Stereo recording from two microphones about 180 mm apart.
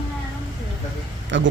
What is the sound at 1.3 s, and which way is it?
Speech, 90° right.